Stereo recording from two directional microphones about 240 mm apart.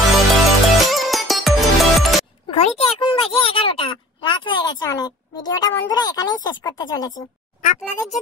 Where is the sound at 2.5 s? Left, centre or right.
Left.